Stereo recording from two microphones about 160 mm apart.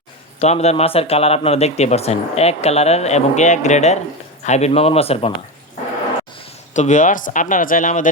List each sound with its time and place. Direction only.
0.3 s speech: 40° left (ahead or behind)
6.7 s speech: 50° left (ahead or behind)